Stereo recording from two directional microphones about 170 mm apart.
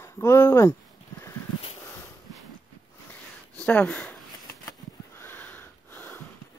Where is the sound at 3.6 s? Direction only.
10° left (ahead or behind).